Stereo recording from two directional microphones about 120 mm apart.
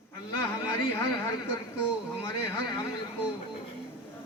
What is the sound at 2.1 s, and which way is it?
Speech, 20° left (ahead or behind).